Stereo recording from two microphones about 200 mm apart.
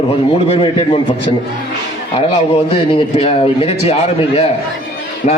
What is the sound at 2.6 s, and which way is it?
A man's voice, 30° left (ahead or behind).